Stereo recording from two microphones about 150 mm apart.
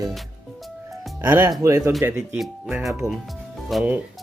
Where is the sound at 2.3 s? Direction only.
Centre (ahead or behind).